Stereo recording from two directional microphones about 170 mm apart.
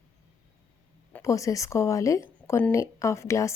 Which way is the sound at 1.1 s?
20° left (ahead or behind).